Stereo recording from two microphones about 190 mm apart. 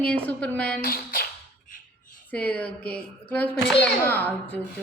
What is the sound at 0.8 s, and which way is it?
Speech, 50° left (ahead or behind).